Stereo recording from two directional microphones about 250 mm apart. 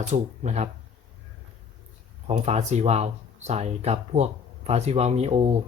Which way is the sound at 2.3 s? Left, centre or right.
Right.